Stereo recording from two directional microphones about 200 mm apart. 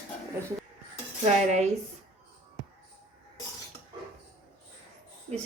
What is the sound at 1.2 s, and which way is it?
Speech, 35° right (ahead or behind).